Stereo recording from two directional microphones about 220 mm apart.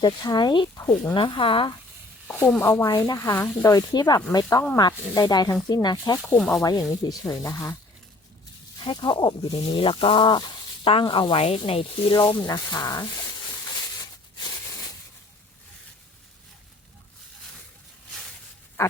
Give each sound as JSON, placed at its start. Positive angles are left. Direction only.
{"t": 0.0, "sound": "speech", "side_deg": 20}
{"t": 2.2, "sound": "speech", "side_deg": 10}
{"t": 8.8, "sound": "speech", "side_deg": 20}
{"t": 18.8, "sound": "pig", "side_deg": 10}